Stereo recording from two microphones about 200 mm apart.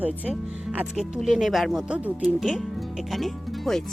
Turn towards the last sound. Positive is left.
turn(degrees=0)  # may be behind; listen again after turning